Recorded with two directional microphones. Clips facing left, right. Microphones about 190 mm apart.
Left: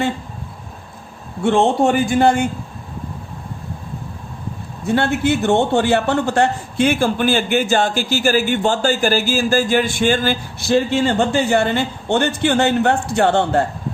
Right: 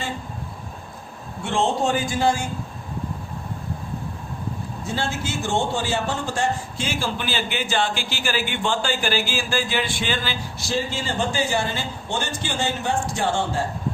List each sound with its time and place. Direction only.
1.5 s a man's voice: 60° left (ahead or behind)
4.9 s a man's voice: 60° left (ahead or behind)